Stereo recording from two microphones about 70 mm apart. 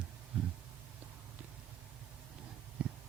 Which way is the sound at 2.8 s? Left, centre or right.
Centre.